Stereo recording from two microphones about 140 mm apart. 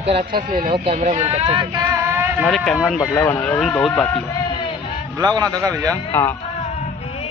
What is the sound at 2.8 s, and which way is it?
Speech, 5° right (ahead or behind).